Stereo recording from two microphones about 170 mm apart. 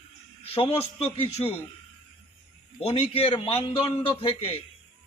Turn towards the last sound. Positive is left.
turn(degrees=35)  # may be behind; listen again after turning